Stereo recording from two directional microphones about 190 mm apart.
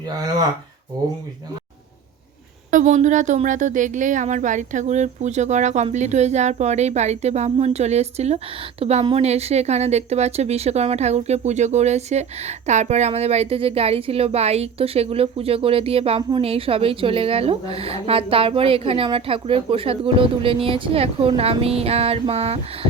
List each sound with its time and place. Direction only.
0.2 s speech: 20° right (ahead or behind)
2.6 s speech: 40° right (ahead or behind)